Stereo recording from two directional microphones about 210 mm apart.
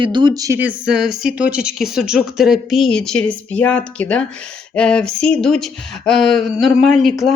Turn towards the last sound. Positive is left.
turn(degrees=0)  # may be behind; listen again after turning